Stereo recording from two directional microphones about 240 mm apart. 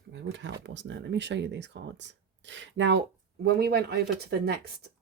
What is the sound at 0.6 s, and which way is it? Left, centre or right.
Speech, right.